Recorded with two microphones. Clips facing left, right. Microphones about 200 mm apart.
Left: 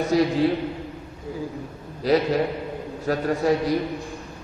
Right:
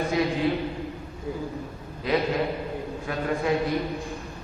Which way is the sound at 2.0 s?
40° left (ahead or behind).